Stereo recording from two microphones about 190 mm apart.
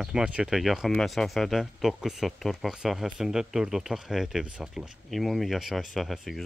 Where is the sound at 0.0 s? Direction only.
5° right (ahead or behind).